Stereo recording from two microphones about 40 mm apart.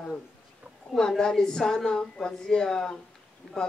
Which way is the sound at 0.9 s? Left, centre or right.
Centre.